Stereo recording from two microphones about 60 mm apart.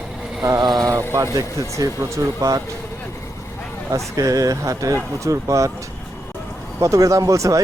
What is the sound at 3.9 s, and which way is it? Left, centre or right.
Speech, right.